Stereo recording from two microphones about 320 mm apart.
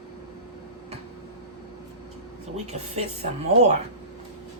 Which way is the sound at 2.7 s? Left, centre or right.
Centre.